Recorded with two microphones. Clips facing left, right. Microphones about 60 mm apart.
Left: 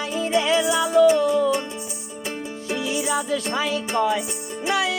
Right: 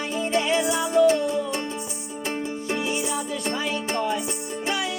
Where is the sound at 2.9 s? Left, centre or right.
Left.